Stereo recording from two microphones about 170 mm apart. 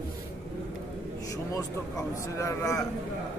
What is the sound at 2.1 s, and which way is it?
Speech, 15° left (ahead or behind).